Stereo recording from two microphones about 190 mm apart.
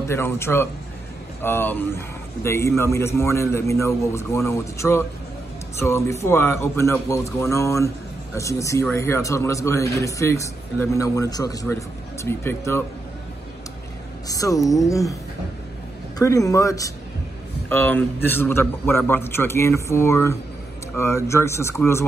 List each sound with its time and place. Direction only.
0.1 s a man's voice: 15° left (ahead or behind)
14.2 s a man's voice: 20° left (ahead or behind)
16.2 s a man's voice: 15° left (ahead or behind)